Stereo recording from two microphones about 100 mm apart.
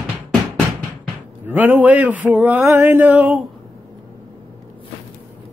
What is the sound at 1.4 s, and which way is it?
A man's voice, 20° right (ahead or behind).